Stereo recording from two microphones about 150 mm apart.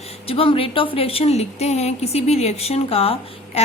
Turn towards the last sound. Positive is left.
turn(degrees=40)  # may be behind; listen again after turning